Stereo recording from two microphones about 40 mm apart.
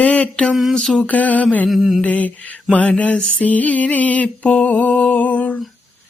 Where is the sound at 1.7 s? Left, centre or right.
Centre.